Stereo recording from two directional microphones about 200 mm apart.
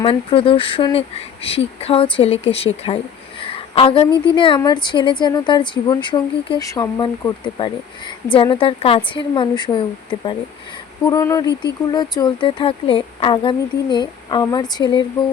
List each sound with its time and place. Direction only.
0.0 s speech: 25° left (ahead or behind)
3.4 s a sound: 25° left (ahead or behind)
4.4 s speech: 25° left (ahead or behind)